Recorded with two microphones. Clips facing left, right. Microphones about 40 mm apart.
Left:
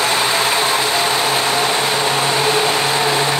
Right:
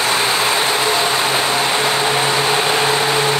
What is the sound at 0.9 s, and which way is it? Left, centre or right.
Vehicle, centre.